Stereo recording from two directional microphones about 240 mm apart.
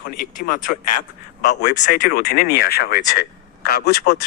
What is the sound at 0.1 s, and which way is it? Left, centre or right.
A man's voice, left.